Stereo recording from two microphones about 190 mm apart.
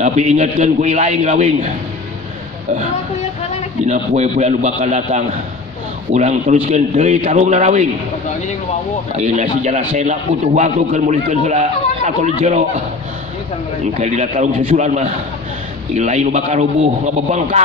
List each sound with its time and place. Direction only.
0.0 s a man's voice: 40° right (ahead or behind)
3.8 s a man's voice: 40° right (ahead or behind)
9.1 s a man's voice: 40° right (ahead or behind)
13.9 s a man's voice: 35° right (ahead or behind)